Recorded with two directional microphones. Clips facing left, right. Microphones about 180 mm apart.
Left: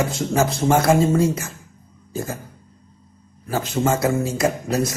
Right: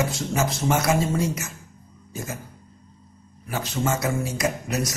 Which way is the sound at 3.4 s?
30° left (ahead or behind).